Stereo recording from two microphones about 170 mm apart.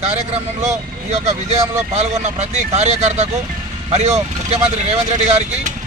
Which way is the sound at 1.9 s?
40° right (ahead or behind).